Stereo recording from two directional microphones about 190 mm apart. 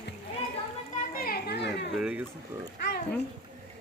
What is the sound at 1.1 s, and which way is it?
Children playing, 50° left (ahead or behind).